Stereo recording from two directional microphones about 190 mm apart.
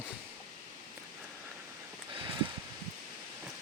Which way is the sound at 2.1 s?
25° right (ahead or behind).